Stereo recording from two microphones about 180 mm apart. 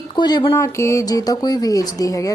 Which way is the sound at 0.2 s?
25° left (ahead or behind).